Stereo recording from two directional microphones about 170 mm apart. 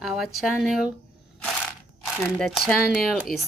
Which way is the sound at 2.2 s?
Centre (ahead or behind).